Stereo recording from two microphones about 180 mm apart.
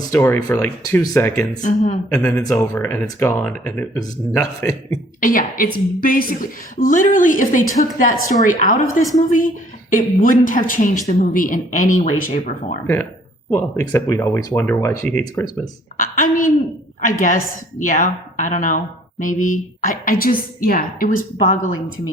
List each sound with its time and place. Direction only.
0.1 s speech: 10° left (ahead or behind)
1.6 s speech: 40° left (ahead or behind)
2.1 s speech: 5° left (ahead or behind)
2.4 s a man's voice: 20° left (ahead or behind)
5.2 s a woman's voice: 50° left (ahead or behind)
13.9 s speech: 15° left (ahead or behind)
16.0 s a woman's voice: 50° left (ahead or behind)